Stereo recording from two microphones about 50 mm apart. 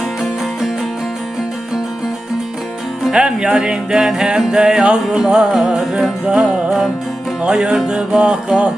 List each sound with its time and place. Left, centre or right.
3.1 s music: centre